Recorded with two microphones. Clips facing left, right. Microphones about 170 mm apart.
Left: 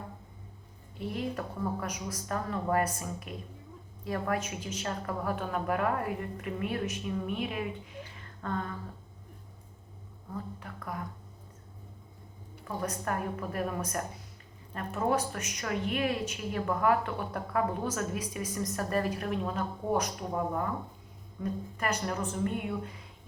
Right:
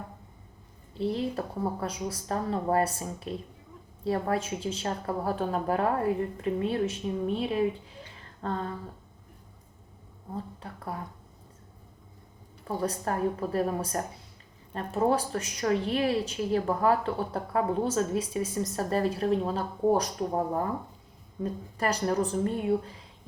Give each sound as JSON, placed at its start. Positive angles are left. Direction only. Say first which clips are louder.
{"t": 0.9, "sound": "a woman's voice", "louder": "right 5 dB", "side_deg": -30}
{"t": 8.1, "sound": "a sound", "louder": "right 3 dB", "side_deg": -35}
{"t": 10.3, "sound": "a woman's voice", "louder": "right 2 dB", "side_deg": -30}
{"t": 12.6, "sound": "a woman's voice", "louder": "right 4 dB", "side_deg": -30}